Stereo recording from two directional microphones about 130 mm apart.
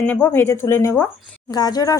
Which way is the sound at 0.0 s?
15° left (ahead or behind).